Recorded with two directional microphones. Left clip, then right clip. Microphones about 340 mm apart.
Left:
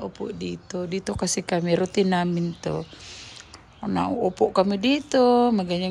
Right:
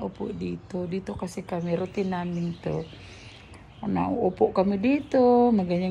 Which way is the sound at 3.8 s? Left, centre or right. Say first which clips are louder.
Left 2 dB; centre.